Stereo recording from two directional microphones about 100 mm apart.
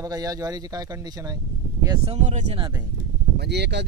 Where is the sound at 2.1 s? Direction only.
55° right (ahead or behind).